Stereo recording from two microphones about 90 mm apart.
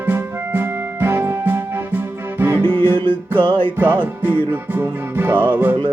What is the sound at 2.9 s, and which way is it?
Music, 65° right (ahead or behind).